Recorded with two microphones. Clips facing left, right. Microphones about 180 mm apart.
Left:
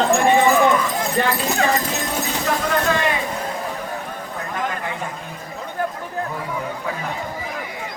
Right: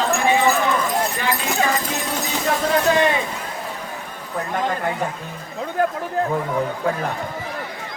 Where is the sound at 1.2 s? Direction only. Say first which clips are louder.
Left 4 dB; 50° left (ahead or behind).